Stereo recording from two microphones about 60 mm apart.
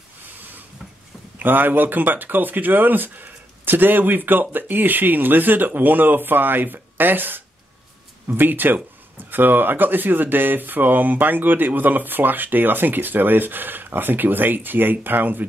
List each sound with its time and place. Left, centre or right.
1.4 s speech: right